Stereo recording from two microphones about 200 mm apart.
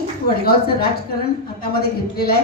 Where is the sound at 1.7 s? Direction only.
50° left (ahead or behind).